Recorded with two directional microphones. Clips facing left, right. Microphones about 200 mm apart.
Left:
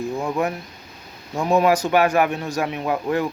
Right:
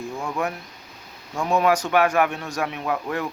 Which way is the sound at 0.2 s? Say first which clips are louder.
Left 3 dB; 20° left (ahead or behind).